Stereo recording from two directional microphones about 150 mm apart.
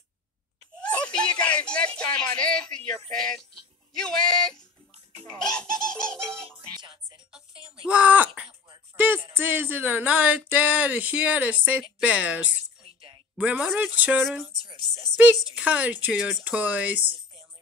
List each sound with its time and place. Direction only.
0.7 s a sound: 5° left (ahead or behind)
3.1 s music: 5° left (ahead or behind)
3.9 s speech: 5° left (ahead or behind)
5.2 s music: 5° left (ahead or behind)
7.9 s speech: 10° right (ahead or behind)
8.9 s music: 15° right (ahead or behind)
9.3 s speech: 15° right (ahead or behind)
12.8 s a sound: 35° right (ahead or behind)
13.4 s speech: 5° right (ahead or behind)
15.4 s speech: 5° right (ahead or behind)
16.2 s music: centre (ahead or behind)
16.4 s speech: 10° right (ahead or behind)